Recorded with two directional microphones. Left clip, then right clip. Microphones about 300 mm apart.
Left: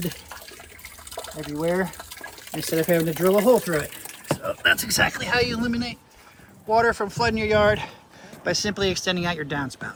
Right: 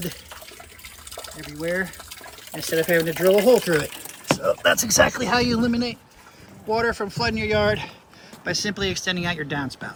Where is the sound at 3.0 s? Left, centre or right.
Centre.